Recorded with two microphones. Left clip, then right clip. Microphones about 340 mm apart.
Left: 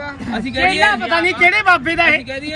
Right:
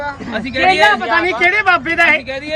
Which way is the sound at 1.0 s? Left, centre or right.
Centre.